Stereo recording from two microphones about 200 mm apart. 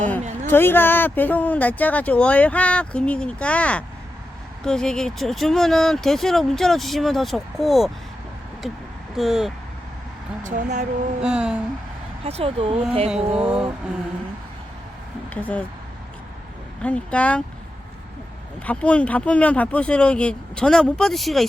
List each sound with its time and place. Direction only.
0.1 s speech: 10° left (ahead or behind)
10.4 s speech: 40° right (ahead or behind)
11.2 s speech: 5° right (ahead or behind)
12.2 s speech: 30° right (ahead or behind)
13.1 s speech: 5° right (ahead or behind)
15.4 s speech: 10° left (ahead or behind)
16.8 s speech: 5° left (ahead or behind)
18.6 s speech: 5° left (ahead or behind)